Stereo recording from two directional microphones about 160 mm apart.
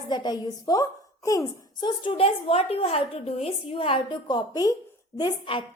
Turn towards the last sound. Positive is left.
turn(degrees=30)  # may be behind; listen again after turning